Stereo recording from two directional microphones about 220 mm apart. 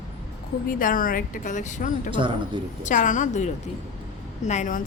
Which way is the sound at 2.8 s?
35° left (ahead or behind).